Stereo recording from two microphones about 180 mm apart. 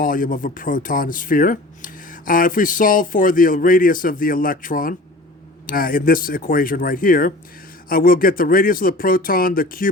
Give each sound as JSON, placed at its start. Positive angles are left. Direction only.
{"t": 0.0, "sound": "speech", "side_deg": 50}